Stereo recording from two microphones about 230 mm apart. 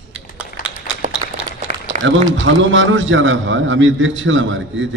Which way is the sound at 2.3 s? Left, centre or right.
Right.